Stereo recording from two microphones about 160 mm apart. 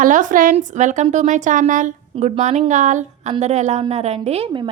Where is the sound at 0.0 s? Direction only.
55° right (ahead or behind).